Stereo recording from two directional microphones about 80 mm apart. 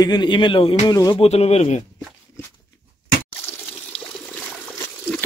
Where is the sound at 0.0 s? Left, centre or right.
Left.